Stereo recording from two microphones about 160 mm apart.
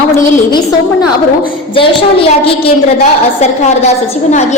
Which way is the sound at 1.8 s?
35° left (ahead or behind).